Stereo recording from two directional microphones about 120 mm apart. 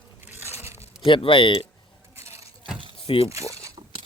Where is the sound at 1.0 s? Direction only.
45° left (ahead or behind).